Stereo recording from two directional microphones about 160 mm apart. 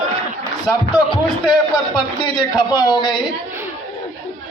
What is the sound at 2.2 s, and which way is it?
A man's voice, 25° left (ahead or behind).